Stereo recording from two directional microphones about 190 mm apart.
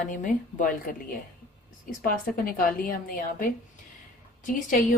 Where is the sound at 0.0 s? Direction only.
45° left (ahead or behind).